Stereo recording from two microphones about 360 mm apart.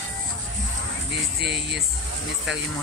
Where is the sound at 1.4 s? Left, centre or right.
Right.